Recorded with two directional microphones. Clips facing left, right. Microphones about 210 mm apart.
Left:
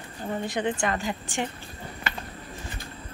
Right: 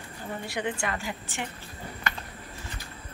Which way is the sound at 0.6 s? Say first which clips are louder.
Left 3 dB; 35° left (ahead or behind).